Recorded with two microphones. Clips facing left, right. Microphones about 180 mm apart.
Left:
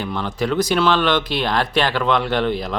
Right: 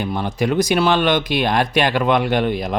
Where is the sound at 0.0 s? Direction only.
15° right (ahead or behind).